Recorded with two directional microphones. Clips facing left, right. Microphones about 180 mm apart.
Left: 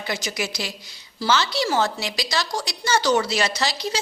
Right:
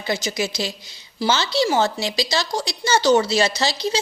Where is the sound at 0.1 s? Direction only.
25° right (ahead or behind).